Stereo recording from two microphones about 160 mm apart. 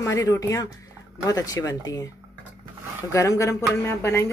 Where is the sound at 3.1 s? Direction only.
20° left (ahead or behind).